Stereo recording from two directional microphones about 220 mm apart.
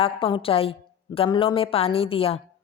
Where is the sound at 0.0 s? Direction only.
25° left (ahead or behind).